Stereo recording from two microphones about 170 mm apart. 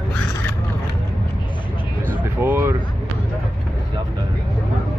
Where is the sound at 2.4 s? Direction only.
15° right (ahead or behind).